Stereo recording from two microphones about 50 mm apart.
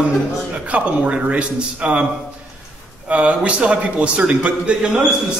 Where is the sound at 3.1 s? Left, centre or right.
Right.